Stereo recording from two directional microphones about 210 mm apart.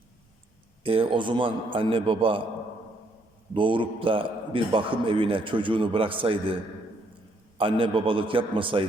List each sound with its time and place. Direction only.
0.9 s a man's voice: 25° right (ahead or behind)
3.5 s a man's voice: 25° right (ahead or behind)
7.6 s a man's voice: 25° right (ahead or behind)